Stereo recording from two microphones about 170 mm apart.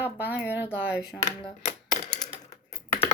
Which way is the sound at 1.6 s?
45° left (ahead or behind).